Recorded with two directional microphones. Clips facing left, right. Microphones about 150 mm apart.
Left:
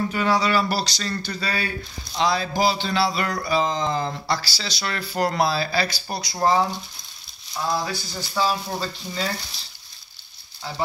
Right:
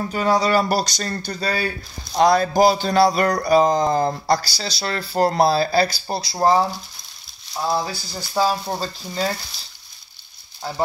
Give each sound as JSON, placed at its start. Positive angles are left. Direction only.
{"t": 0.1, "sound": "speech", "side_deg": -40}
{"t": 7.6, "sound": "speech", "side_deg": -30}
{"t": 8.4, "sound": "speech", "side_deg": -40}